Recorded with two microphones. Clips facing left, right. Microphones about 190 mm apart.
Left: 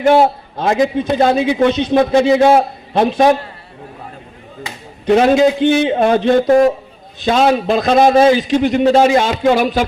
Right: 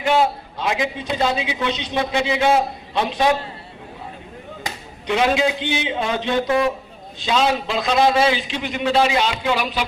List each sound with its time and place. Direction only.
0.0 s a man's voice: 45° left (ahead or behind)
5.0 s a man's voice: 45° left (ahead or behind)